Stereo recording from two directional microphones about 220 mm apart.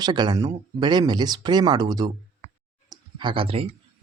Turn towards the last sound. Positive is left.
turn(degrees=-25)  # may be behind; listen again after turning